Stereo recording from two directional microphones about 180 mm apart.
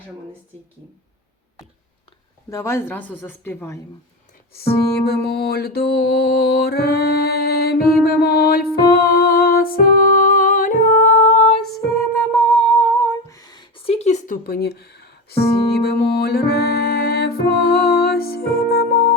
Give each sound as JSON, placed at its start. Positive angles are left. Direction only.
{"t": 2.5, "sound": "a woman's voice", "side_deg": 15}
{"t": 5.0, "sound": "mantra", "side_deg": 60}
{"t": 10.2, "sound": "music", "side_deg": 45}
{"t": 11.9, "sound": "humming", "side_deg": 10}
{"t": 14.4, "sound": "speech", "side_deg": 60}
{"t": 15.8, "sound": "music", "side_deg": 60}